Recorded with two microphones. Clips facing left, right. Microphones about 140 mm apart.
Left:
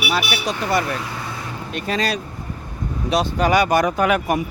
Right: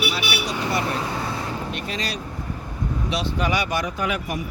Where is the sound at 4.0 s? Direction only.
60° left (ahead or behind).